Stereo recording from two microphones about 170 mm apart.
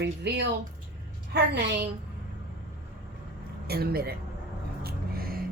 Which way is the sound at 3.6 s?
65° right (ahead or behind).